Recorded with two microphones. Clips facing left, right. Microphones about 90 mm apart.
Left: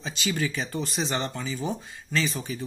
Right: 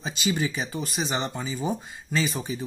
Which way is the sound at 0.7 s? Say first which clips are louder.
Even; 5° right (ahead or behind).